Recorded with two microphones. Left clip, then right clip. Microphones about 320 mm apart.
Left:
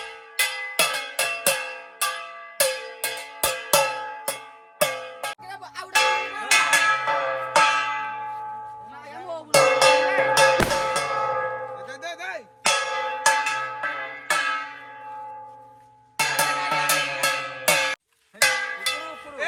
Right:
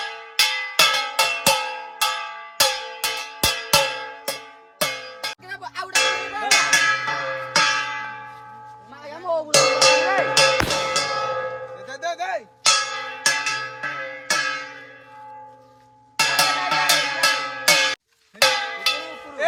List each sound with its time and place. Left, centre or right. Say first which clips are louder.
0.0 s music: right 5 dB; centre
2.6 s music: right 4 dB; centre
5.5 s music: right 3 dB; centre
9.5 s music: even; left
11.9 s music: right 6 dB; right
12.6 s a sound: right 2 dB; centre
16.2 s music: right 3 dB; centre
18.4 s cowbell: right 3 dB; centre
19.4 s a sound: right 6 dB; right